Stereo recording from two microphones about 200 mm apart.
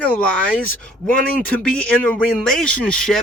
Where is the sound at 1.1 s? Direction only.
45° left (ahead or behind).